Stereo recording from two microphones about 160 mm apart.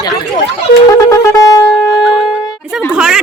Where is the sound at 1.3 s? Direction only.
20° left (ahead or behind).